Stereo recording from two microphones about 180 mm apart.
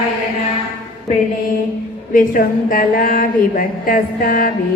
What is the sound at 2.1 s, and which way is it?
A woman's voice, 50° left (ahead or behind).